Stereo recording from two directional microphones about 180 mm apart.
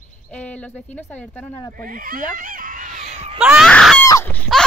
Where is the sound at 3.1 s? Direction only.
35° right (ahead or behind).